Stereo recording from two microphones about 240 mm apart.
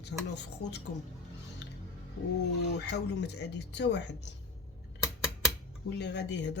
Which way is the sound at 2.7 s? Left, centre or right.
Left.